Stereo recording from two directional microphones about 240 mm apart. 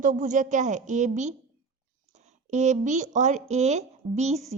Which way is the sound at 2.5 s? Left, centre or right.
Right.